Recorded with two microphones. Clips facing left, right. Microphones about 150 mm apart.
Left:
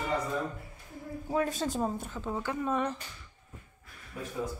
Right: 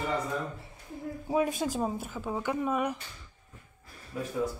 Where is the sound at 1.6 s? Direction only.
5° right (ahead or behind).